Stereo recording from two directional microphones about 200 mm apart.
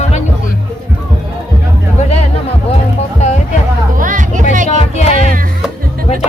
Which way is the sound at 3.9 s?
40° right (ahead or behind).